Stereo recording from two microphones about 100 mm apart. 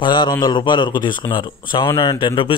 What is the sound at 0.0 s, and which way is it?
A man's voice, 50° left (ahead or behind).